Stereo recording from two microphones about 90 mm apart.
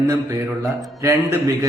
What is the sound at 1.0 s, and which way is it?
Speech, 35° right (ahead or behind).